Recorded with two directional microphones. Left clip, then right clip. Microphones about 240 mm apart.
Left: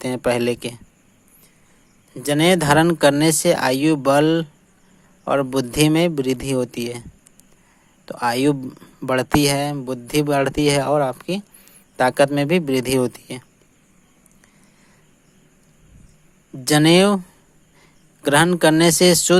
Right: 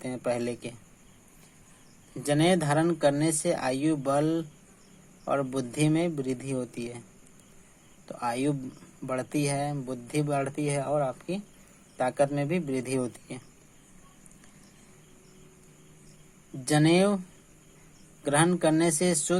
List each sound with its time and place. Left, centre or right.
0.0 s speech: left
2.1 s speech: left
8.0 s speech: left
16.6 s speech: left
18.2 s speech: left